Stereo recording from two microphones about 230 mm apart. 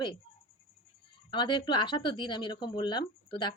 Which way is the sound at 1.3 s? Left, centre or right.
Centre.